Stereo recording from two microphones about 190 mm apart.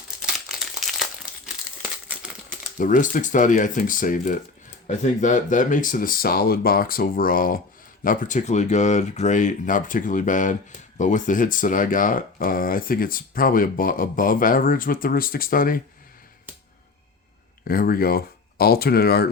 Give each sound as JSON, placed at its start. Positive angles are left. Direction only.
{"t": 0.2, "sound": "crumpling", "side_deg": 0}
{"t": 2.7, "sound": "speech", "side_deg": 45}
{"t": 17.7, "sound": "speech", "side_deg": 50}